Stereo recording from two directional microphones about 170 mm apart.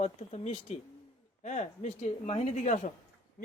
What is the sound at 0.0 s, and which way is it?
Speech, 40° left (ahead or behind).